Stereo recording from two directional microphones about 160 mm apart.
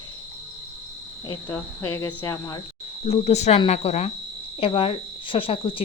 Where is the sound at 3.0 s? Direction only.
40° left (ahead or behind).